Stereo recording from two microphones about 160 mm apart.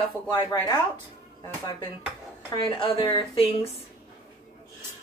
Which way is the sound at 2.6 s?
30° left (ahead or behind).